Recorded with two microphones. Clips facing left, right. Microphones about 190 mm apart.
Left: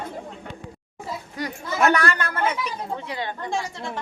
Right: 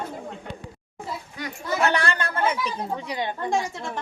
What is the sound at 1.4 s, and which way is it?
Chatter, 40° left (ahead or behind).